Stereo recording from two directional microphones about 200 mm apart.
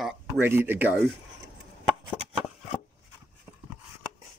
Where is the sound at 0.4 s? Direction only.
10° right (ahead or behind).